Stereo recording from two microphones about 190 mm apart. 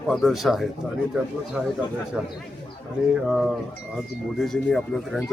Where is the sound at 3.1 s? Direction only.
Centre (ahead or behind).